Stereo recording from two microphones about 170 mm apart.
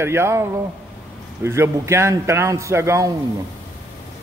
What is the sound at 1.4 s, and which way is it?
A man's voice, 15° right (ahead or behind).